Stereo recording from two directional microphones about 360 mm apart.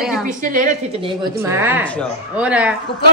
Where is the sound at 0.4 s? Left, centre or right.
Right.